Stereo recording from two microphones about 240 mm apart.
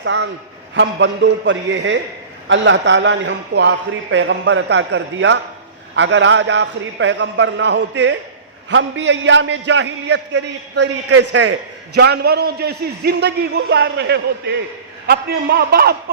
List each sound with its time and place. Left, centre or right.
0.0 s a man's voice: right